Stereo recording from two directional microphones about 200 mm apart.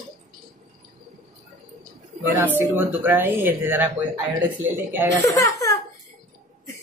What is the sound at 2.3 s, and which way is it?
Speech, 10° right (ahead or behind).